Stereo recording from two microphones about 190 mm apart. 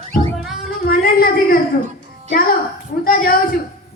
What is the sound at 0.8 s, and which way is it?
Speech, 50° left (ahead or behind).